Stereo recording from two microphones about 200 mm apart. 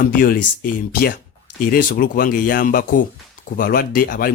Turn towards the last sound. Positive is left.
turn(degrees=45)  # may be behind; listen again after turning